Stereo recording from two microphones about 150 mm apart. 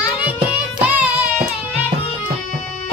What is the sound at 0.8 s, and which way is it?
Music, 10° right (ahead or behind).